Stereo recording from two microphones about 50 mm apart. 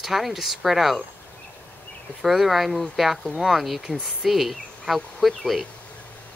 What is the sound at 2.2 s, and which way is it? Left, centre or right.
Speech, centre.